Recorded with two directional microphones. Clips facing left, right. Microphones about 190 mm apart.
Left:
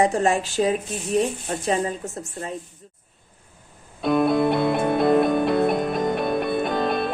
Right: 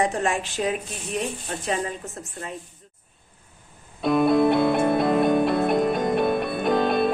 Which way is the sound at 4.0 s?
Centre (ahead or behind).